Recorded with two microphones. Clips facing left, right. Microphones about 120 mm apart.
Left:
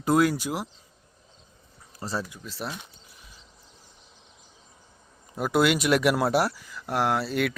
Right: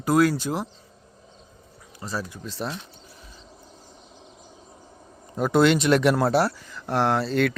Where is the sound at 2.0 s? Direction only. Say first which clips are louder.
Even; 30° left (ahead or behind).